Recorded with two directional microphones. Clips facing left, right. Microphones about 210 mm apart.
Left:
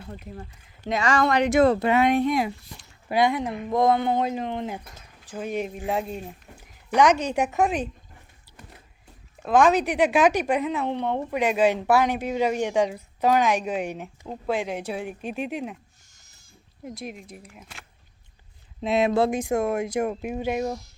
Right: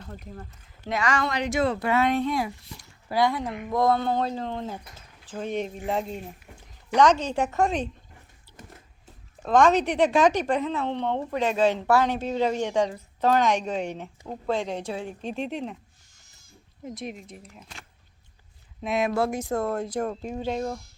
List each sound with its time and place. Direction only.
0.0 s speech: 10° left (ahead or behind)
0.9 s speech: 20° left (ahead or behind)
1.2 s speech: 55° left (ahead or behind)
1.8 s a woman's voice: 15° left (ahead or behind)
9.4 s a woman's voice: 5° left (ahead or behind)
17.0 s speech: centre (ahead or behind)
18.8 s a woman's voice: 25° left (ahead or behind)